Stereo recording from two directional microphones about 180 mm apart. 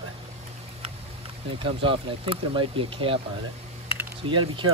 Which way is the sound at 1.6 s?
30° right (ahead or behind).